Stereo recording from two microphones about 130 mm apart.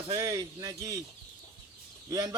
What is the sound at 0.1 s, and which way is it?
Speech, 25° right (ahead or behind).